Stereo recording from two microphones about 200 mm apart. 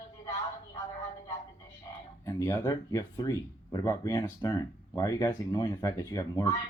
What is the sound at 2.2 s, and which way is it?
Speech, 15° left (ahead or behind).